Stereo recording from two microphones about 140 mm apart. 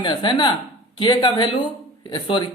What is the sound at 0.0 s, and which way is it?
Speech, 35° left (ahead or behind).